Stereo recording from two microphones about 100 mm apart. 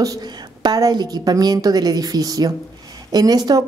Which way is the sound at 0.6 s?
40° right (ahead or behind).